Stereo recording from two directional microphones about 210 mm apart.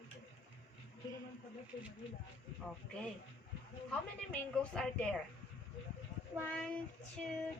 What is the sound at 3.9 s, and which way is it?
A woman's voice, 5° left (ahead or behind).